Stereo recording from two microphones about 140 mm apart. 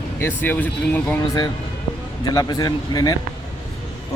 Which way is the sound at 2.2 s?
30° left (ahead or behind).